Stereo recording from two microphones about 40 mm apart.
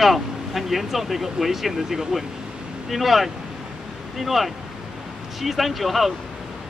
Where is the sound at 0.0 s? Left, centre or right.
Centre.